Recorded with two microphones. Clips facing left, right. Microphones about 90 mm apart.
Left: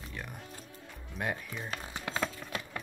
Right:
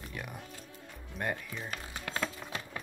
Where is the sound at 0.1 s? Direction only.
5° right (ahead or behind).